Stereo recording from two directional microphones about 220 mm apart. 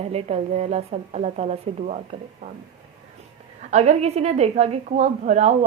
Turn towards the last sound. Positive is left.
turn(degrees=-30)  # may be behind; listen again after turning